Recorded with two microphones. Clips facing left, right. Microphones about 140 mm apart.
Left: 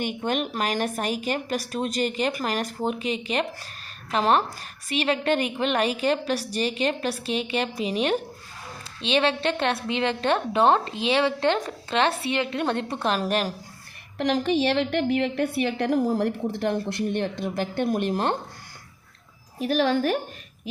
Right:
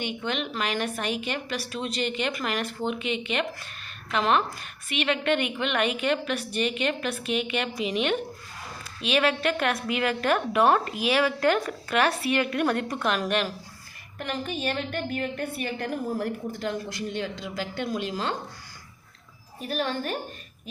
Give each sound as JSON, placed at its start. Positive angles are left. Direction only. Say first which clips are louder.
{"t": 0.0, "sound": "a woman's voice", "louder": "left 4 dB", "side_deg": 45}
{"t": 14.2, "sound": "a woman's voice", "louder": "left 9 dB", "side_deg": 80}
{"t": 19.5, "sound": "a woman's voice", "louder": "left 7 dB", "side_deg": 90}